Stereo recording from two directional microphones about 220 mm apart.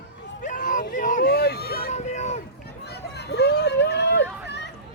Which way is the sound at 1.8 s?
30° left (ahead or behind).